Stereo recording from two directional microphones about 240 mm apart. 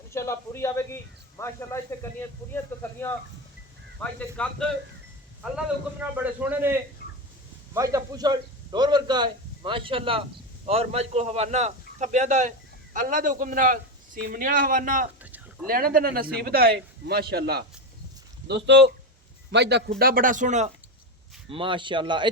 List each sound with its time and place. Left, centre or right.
0.1 s a man's voice: centre
4.0 s speech: centre
6.0 s a man's voice: centre